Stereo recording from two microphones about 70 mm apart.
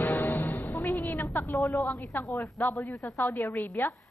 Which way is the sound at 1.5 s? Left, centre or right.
Left.